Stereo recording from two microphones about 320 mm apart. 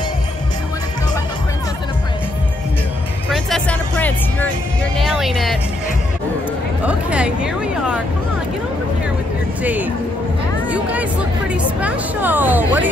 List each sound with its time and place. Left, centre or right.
3.3 s music: centre
6.9 s a sound: centre
9.6 s music: centre